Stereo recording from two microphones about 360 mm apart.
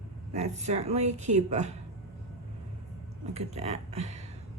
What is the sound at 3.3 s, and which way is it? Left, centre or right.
Speech, centre.